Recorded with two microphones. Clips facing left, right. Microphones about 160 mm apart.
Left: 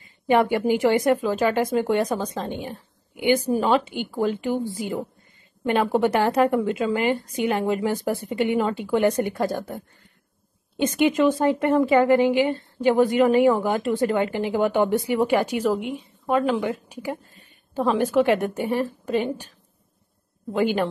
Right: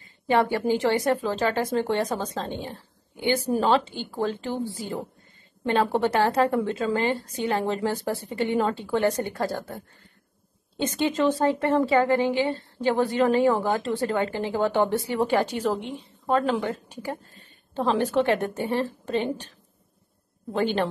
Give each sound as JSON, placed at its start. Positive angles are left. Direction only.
{"t": 0.0, "sound": "a woman's voice", "side_deg": 20}
{"t": 10.8, "sound": "speech", "side_deg": 15}